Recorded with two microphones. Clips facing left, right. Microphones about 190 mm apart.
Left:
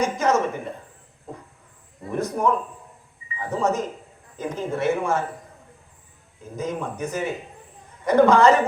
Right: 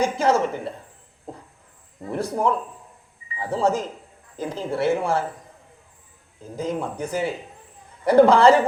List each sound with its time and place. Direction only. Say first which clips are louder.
0.0 s speech: right 1 dB; 30° right (ahead or behind)
2.1 s speech: even; 30° right (ahead or behind)
6.6 s speech: right 1 dB; 30° right (ahead or behind)